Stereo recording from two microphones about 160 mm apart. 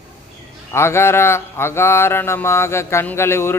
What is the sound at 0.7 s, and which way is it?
Mantra, 15° left (ahead or behind).